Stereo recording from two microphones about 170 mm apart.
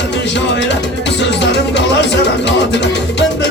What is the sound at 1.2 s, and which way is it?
Music, 90° left.